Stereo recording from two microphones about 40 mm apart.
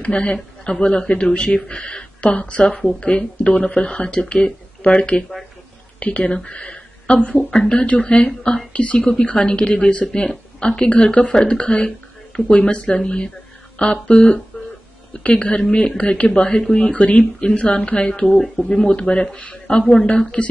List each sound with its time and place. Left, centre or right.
0.0 s a woman's voice: left
16.3 s speech: left
18.9 s speech: left